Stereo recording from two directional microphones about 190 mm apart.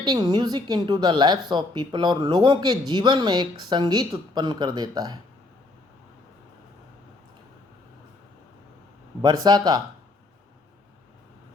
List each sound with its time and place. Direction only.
0.0 s speech: 25° right (ahead or behind)
9.2 s speech: 20° right (ahead or behind)